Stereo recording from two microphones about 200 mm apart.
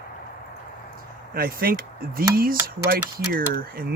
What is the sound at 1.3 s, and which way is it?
Speech, 50° right (ahead or behind).